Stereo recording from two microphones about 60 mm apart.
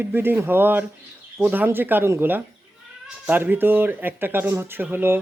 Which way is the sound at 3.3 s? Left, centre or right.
Right.